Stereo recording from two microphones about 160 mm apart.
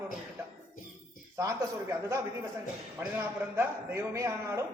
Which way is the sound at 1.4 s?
20° right (ahead or behind).